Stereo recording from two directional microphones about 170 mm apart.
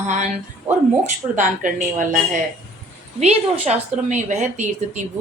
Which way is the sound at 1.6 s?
50° right (ahead or behind).